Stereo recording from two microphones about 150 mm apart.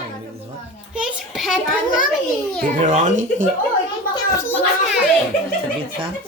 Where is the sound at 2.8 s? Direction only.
55° right (ahead or behind).